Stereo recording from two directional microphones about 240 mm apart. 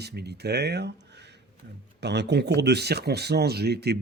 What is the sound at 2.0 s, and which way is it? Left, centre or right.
Speech, right.